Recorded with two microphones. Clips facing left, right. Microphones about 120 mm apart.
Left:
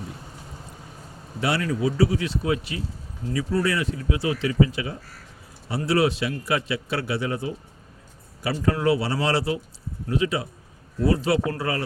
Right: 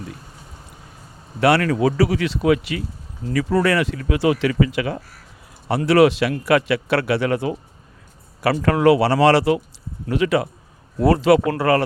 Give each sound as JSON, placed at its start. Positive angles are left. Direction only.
{"t": 1.4, "sound": "a man's voice", "side_deg": -70}
{"t": 8.6, "sound": "a man's voice", "side_deg": -85}
{"t": 11.0, "sound": "speech", "side_deg": -90}